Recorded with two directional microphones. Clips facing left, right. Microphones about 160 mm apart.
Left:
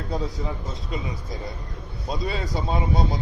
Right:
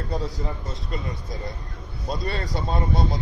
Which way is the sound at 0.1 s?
Centre (ahead or behind).